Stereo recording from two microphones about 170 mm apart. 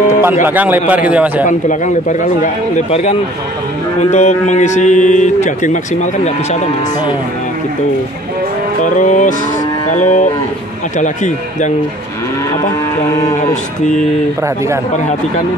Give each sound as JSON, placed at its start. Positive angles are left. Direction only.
{"t": 0.2, "sound": "a man's voice", "side_deg": -15}
{"t": 1.7, "sound": "speech", "side_deg": 50}
{"t": 8.8, "sound": "speech", "side_deg": 50}